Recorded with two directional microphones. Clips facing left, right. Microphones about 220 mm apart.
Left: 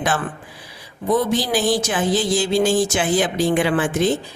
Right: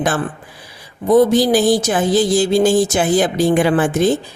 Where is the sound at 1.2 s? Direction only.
40° right (ahead or behind).